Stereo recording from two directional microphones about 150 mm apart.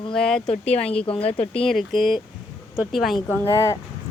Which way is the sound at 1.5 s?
Centre (ahead or behind).